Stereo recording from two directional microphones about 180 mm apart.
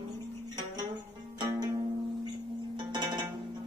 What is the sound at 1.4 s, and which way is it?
Music, 20° right (ahead or behind).